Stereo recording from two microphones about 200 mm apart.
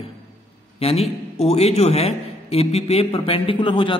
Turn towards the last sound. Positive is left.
turn(degrees=25)  # may be behind; listen again after turning